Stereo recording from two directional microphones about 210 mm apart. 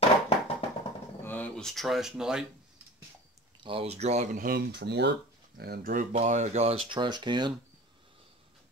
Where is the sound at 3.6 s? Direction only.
25° right (ahead or behind); by 6.0 s 45° right (ahead or behind).